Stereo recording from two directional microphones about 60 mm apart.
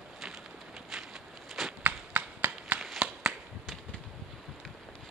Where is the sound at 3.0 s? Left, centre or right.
Centre.